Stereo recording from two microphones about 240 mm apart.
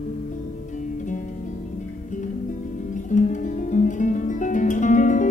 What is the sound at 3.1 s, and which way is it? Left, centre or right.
Guitar, left.